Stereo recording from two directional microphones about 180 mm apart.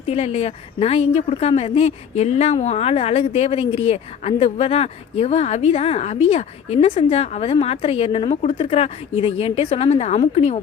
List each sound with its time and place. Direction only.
0.0 s a woman's voice: 35° left (ahead or behind)